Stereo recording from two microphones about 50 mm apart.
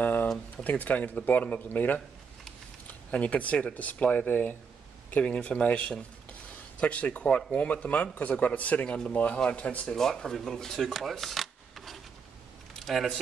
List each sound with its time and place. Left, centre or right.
0.0 s a sound: left
0.7 s a man's voice: left
3.1 s speech: left
9.9 s speech: centre